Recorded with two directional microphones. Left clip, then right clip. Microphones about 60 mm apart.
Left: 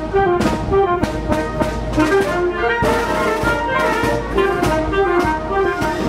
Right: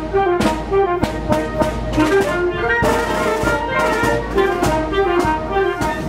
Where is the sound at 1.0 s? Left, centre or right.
Right.